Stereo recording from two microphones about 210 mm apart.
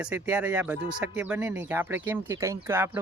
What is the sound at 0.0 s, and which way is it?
Speech, 5° right (ahead or behind).